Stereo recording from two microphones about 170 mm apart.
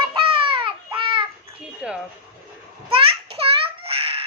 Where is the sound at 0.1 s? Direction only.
30° right (ahead or behind).